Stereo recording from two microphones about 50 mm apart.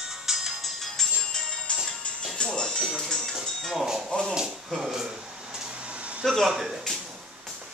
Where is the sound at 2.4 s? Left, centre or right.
Centre.